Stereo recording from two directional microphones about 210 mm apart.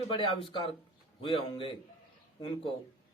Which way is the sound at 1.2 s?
25° left (ahead or behind).